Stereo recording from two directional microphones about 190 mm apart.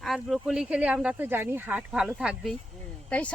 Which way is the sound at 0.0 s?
Centre (ahead or behind).